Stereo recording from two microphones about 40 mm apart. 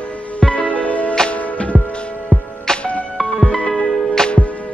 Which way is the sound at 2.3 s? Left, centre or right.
Right.